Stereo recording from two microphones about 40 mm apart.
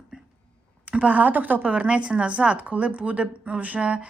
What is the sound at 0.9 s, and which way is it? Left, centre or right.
A woman's voice, right.